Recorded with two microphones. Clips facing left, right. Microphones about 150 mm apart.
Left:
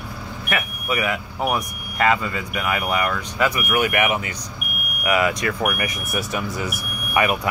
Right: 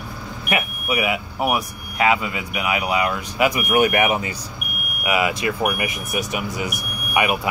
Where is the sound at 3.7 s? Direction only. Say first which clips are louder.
Right 3 dB; 30° right (ahead or behind).